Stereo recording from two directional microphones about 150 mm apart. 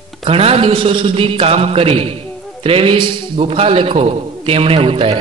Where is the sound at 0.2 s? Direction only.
40° right (ahead or behind).